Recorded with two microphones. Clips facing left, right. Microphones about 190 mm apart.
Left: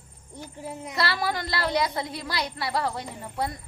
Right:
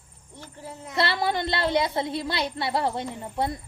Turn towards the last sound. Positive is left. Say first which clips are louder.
# right 3 dB
turn(degrees=-25)  # may be behind; listen again after turning